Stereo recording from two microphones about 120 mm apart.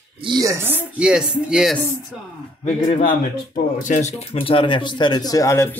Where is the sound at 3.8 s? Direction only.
80° left.